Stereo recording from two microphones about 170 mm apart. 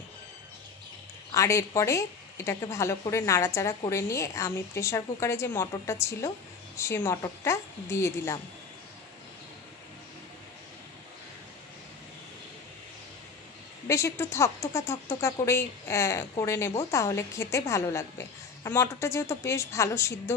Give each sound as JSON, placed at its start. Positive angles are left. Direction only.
{"t": 1.3, "sound": "speech", "side_deg": 20}
{"t": 13.8, "sound": "speech", "side_deg": 15}